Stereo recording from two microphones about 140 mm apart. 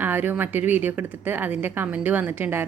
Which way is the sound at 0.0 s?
15° right (ahead or behind).